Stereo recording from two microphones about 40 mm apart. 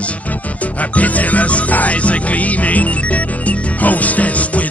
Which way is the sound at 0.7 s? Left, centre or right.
Left.